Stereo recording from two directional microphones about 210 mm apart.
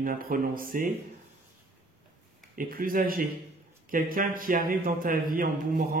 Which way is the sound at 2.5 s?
45° right (ahead or behind).